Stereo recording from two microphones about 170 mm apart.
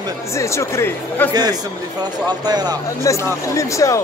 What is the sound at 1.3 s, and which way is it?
Speech, 25° right (ahead or behind).